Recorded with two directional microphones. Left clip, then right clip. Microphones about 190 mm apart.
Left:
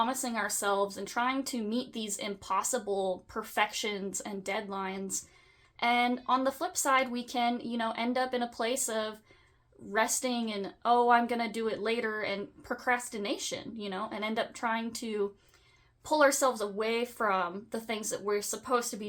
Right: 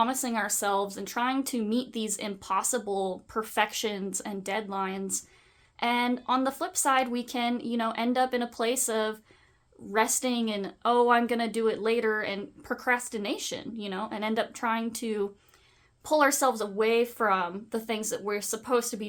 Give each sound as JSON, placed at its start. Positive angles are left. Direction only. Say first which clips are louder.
{"t": 0.0, "sound": "a woman's voice", "louder": "right 3 dB", "side_deg": -35}